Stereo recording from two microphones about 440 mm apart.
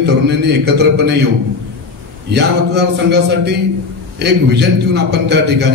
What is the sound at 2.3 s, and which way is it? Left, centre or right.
A man's voice, right.